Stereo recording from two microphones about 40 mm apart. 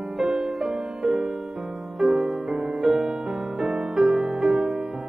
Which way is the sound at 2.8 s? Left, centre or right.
Centre.